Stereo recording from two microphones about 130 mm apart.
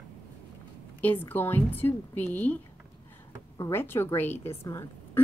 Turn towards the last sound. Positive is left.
turn(degrees=20)  # may be behind; listen again after turning